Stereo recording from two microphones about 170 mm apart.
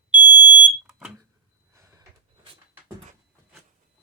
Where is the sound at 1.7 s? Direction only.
15° right (ahead or behind).